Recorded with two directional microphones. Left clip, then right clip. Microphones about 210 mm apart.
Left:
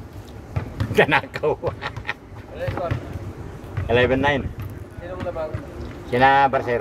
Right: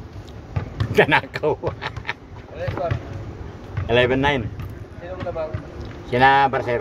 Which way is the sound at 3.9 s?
15° right (ahead or behind).